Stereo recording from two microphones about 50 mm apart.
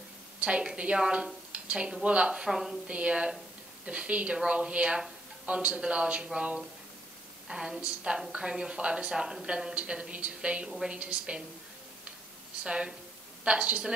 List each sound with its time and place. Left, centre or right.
0.4 s a woman's voice: right
2.9 s a woman's voice: right
12.6 s speech: centre